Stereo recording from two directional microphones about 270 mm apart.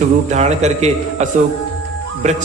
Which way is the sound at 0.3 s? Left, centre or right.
Right.